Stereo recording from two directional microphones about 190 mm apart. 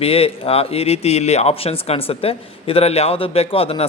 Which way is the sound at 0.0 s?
30° left (ahead or behind).